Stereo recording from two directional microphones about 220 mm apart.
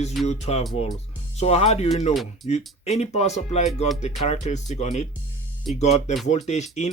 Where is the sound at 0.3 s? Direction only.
30° left (ahead or behind).